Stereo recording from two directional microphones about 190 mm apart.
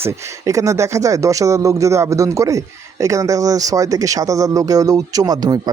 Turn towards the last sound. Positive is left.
turn(degrees=-20)  # may be behind; listen again after turning